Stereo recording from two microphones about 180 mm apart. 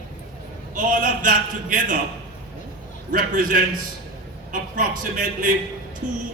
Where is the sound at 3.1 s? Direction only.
50° right (ahead or behind).